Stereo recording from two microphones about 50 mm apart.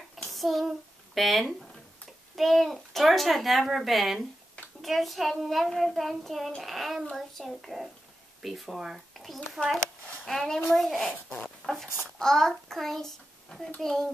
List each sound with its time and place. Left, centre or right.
0.3 s child singing: centre
2.3 s a child's voice: centre